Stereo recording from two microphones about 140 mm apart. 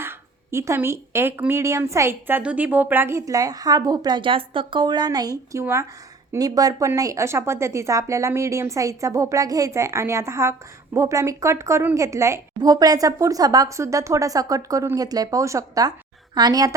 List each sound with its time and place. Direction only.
0.0 s speech: 20° right (ahead or behind)